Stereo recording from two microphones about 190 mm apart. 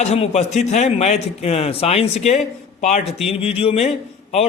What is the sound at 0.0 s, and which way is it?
A man's voice, 35° left (ahead or behind).